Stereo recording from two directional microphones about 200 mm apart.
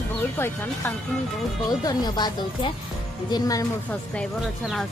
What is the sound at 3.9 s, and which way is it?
Speech, 5° left (ahead or behind).